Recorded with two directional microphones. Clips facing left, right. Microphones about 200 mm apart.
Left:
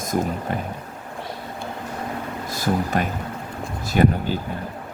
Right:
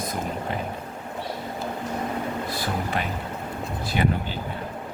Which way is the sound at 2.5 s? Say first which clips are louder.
Left 10 dB; 45° left (ahead or behind).